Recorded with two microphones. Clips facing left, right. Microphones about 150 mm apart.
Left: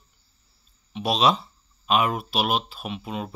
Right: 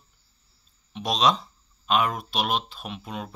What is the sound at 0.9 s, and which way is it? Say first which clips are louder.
Speech: left 2 dB; 5° left (ahead or behind).